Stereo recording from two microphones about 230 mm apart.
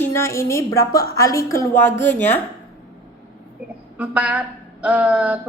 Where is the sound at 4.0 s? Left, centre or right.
Centre.